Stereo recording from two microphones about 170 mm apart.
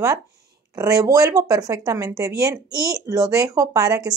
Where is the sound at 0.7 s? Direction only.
20° right (ahead or behind).